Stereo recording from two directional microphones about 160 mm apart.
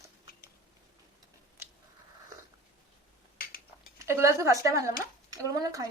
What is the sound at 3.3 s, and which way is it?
Cutlery, 65° left (ahead or behind).